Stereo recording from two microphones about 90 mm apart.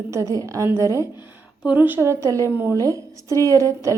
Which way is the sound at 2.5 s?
20° right (ahead or behind).